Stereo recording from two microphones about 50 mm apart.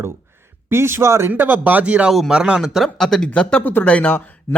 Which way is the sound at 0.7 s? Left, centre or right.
Right.